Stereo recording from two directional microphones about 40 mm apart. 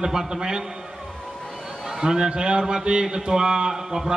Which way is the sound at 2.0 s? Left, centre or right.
Centre.